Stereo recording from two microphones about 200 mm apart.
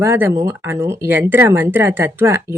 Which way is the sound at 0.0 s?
10° right (ahead or behind).